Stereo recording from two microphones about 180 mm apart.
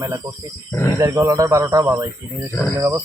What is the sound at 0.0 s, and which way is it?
Speech, 20° right (ahead or behind).